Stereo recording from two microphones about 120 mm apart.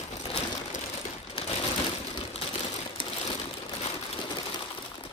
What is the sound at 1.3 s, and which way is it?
Sewing machine, 55° left (ahead or behind).